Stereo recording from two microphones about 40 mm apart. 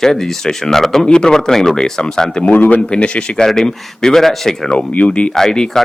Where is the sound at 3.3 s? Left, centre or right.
Centre.